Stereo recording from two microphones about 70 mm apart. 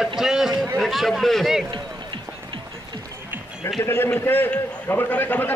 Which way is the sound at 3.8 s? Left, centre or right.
Left.